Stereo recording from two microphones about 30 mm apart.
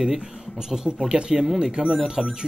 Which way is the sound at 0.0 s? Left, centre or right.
Centre.